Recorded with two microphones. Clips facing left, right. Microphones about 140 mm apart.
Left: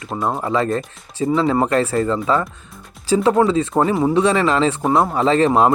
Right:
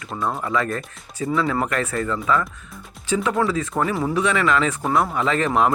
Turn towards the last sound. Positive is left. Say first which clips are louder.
# left 5 dB
turn(degrees=30)  # may be behind; listen again after turning